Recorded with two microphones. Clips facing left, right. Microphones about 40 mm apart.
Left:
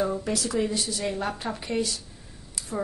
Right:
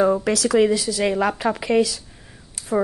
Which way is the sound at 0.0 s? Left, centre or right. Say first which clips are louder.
Right 9 dB; right.